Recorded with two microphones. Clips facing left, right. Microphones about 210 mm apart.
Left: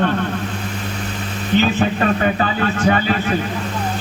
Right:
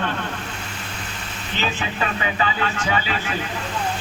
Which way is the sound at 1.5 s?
50° left (ahead or behind).